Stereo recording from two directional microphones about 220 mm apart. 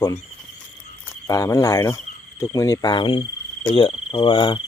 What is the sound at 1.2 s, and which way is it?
Speech, 15° left (ahead or behind).